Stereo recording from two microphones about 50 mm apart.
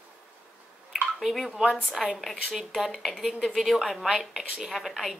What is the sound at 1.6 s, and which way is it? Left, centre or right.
Speech, centre.